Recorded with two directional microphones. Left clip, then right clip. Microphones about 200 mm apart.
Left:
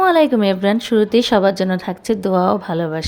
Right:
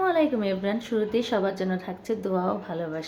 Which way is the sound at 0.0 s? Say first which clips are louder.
Left 10 dB; 55° left (ahead or behind).